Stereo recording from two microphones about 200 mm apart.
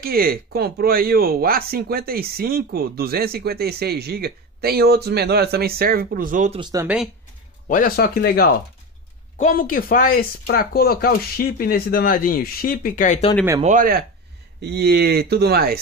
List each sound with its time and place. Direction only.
0.0 s speech: 50° right (ahead or behind)
6.6 s speech: 15° right (ahead or behind)
7.6 s speech: 45° left (ahead or behind)
13.6 s speech: 40° right (ahead or behind)
14.6 s speech: 55° right (ahead or behind)